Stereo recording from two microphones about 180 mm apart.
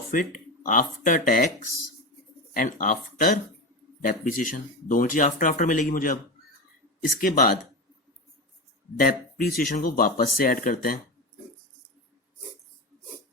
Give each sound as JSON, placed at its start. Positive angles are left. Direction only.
{"t": 0.1, "sound": "speech", "side_deg": 50}
{"t": 2.5, "sound": "speech", "side_deg": 50}
{"t": 9.0, "sound": "speech", "side_deg": 55}